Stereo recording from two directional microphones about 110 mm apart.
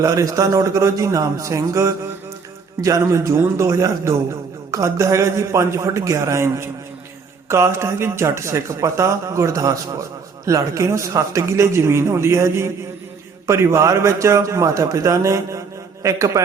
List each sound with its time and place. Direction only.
0.0 s speech: 30° right (ahead or behind)